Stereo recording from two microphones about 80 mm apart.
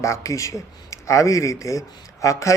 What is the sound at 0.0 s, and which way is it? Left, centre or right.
Speech, left.